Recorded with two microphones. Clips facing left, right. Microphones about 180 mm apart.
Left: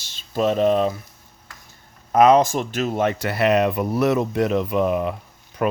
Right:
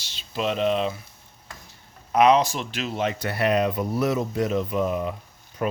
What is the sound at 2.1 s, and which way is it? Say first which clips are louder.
Speech: left 4 dB; 45° left (ahead or behind).